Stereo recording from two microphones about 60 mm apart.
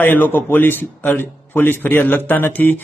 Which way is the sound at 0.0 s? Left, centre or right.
Left.